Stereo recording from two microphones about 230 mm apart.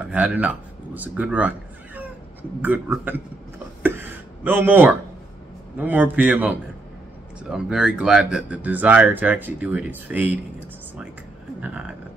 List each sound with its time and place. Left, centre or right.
0.0 s speech: centre
2.6 s a sound: centre
5.8 s a man's voice: centre